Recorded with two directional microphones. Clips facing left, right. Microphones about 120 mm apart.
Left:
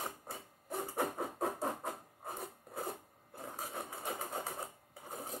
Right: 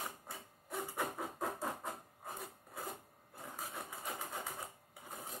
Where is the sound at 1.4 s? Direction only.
30° left (ahead or behind).